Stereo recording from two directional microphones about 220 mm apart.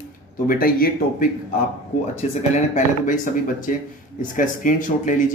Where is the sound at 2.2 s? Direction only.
30° left (ahead or behind).